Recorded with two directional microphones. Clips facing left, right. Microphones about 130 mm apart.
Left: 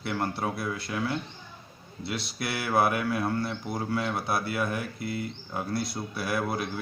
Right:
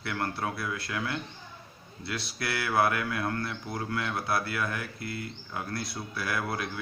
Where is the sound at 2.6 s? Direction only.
20° left (ahead or behind).